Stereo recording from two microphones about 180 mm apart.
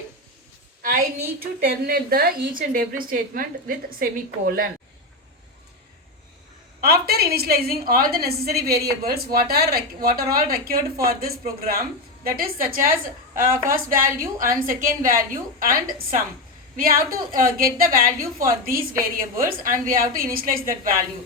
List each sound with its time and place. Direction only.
0.8 s a woman's voice: 55° right (ahead or behind)
6.8 s a woman's voice: 60° right (ahead or behind)